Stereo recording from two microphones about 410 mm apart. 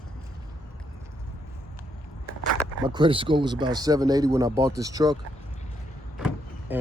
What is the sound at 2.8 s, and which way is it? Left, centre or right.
Speech, centre.